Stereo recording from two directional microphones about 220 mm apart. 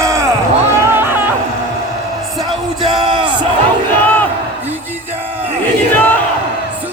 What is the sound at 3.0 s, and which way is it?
Speech, 20° right (ahead or behind).